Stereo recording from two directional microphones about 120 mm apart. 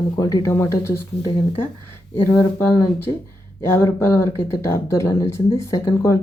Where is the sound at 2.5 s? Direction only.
20° left (ahead or behind).